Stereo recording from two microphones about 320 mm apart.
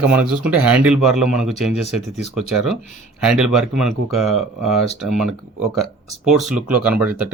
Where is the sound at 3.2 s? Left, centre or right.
Centre.